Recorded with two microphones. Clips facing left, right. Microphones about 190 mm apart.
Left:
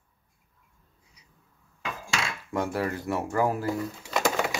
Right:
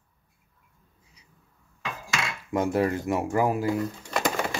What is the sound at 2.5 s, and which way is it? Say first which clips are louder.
Speech: right 5 dB; 20° right (ahead or behind).